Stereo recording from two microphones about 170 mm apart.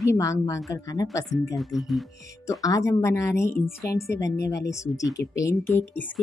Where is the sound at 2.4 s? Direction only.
20° left (ahead or behind).